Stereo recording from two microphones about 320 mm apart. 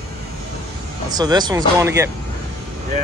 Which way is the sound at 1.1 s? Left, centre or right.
Centre.